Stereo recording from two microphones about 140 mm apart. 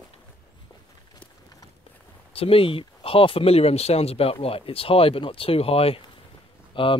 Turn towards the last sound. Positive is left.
turn(degrees=35)  # may be behind; listen again after turning